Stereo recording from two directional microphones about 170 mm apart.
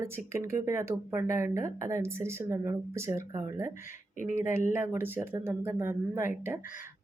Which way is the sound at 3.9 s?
50° left (ahead or behind).